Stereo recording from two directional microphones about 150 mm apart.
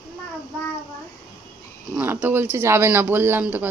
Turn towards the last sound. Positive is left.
turn(degrees=-15)  # may be behind; listen again after turning